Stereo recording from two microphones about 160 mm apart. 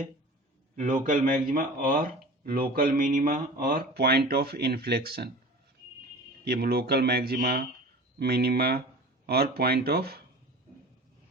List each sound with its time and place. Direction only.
0.8 s speech: 55° right (ahead or behind); by 5.3 s 80° right
6.4 s speech: 80° right
8.2 s speech: 90° right